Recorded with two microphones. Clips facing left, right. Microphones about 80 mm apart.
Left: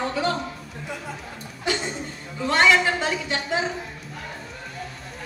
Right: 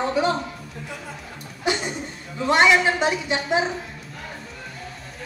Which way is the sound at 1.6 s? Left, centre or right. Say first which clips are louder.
Right 2 dB; centre.